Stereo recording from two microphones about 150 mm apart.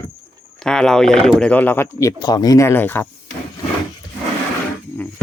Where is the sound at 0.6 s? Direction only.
5° left (ahead or behind).